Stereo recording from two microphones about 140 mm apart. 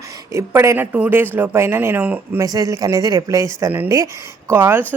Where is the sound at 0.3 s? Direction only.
20° right (ahead or behind).